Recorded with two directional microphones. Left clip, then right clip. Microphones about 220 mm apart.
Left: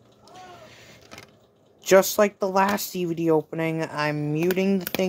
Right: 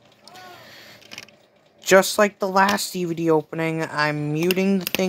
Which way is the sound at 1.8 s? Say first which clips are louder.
Right 2 dB; centre (ahead or behind).